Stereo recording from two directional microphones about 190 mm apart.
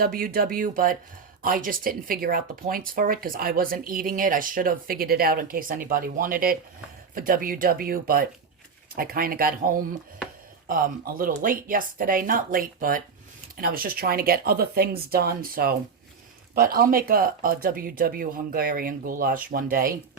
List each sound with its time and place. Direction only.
0.0 s speech: 50° right (ahead or behind)